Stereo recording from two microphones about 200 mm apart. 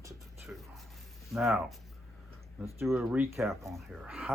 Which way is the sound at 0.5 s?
5° right (ahead or behind).